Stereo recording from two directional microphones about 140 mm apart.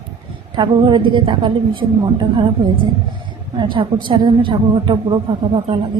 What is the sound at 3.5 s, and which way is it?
A woman's voice, 35° right (ahead or behind).